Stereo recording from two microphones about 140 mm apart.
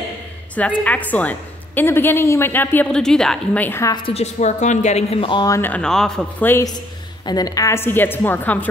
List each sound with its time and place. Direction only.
0.6 s speech: 10° left (ahead or behind)
3.8 s a woman's voice: 30° left (ahead or behind)
4.1 s speech: 50° left (ahead or behind); by 5.5 s 35° left (ahead or behind)
5.5 s speech: 15° left (ahead or behind)
6.5 s a woman's voice: 25° left (ahead or behind)